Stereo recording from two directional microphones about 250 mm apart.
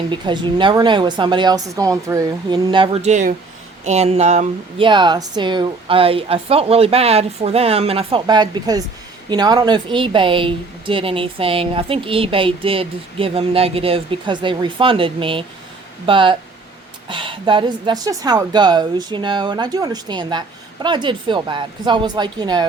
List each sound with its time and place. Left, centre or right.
0.1 s a woman's voice: centre